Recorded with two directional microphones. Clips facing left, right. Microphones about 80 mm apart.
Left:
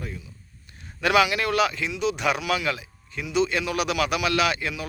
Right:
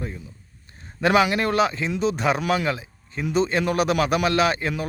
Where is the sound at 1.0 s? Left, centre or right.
Right.